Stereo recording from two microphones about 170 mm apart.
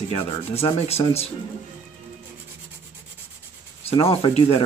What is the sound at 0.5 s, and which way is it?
Speech, 35° left (ahead or behind).